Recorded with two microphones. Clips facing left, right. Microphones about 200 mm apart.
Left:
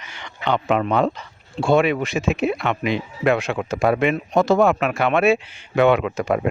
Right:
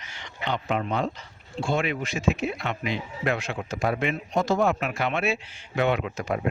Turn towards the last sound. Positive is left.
turn(degrees=80)